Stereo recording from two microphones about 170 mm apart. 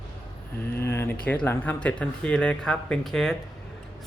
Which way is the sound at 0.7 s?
15° left (ahead or behind).